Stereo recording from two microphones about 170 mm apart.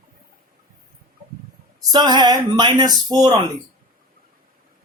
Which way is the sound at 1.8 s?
25° right (ahead or behind).